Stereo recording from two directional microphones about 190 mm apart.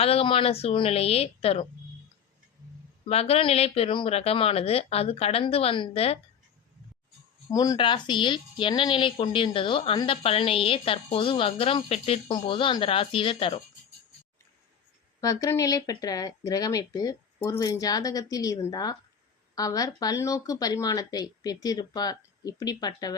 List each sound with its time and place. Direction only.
0.0 s speech: 30° left (ahead or behind)
3.1 s speech: 30° left (ahead or behind)
7.5 s speech: 20° left (ahead or behind)
15.2 s speech: 20° left (ahead or behind)